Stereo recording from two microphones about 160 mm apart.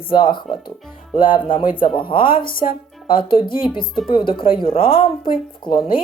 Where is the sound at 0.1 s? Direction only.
30° left (ahead or behind).